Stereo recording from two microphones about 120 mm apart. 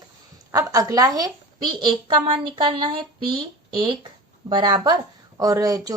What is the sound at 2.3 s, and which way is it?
Speech, 40° right (ahead or behind).